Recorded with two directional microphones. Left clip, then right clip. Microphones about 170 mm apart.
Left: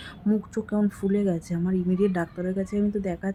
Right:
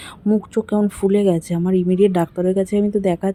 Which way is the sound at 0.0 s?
30° right (ahead or behind).